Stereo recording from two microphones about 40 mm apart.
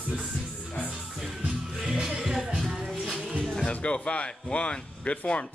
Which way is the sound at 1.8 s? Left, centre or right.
Centre.